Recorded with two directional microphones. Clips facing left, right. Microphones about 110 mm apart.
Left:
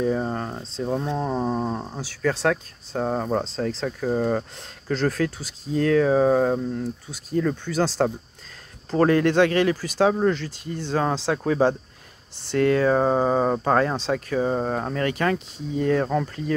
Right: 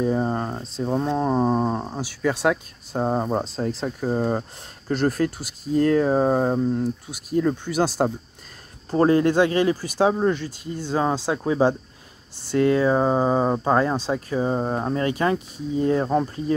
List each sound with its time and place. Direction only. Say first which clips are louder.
0.1 s speech: right 2 dB; 15° right (ahead or behind)
1.1 s speech: right 4 dB; 30° right (ahead or behind); by 8.1 s 10° right (ahead or behind)
8.9 s speech: right 1 dB; 25° right (ahead or behind)